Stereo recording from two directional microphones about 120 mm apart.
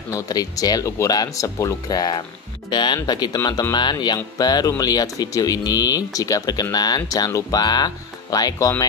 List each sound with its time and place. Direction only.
0.1 s speech: 30° left (ahead or behind)